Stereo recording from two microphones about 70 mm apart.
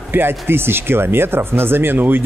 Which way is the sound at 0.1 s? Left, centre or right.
Right.